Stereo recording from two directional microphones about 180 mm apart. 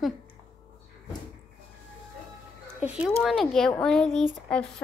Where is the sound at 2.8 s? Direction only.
5° right (ahead or behind).